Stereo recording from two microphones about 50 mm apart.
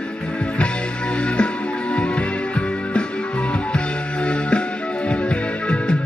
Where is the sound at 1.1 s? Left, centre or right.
Left.